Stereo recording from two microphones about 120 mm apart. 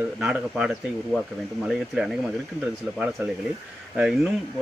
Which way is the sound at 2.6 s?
15° right (ahead or behind).